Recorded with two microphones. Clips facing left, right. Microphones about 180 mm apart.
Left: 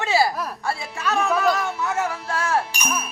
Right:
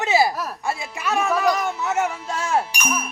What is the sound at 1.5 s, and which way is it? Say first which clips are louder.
A man's voice: right 1 dB; 20° right (ahead or behind).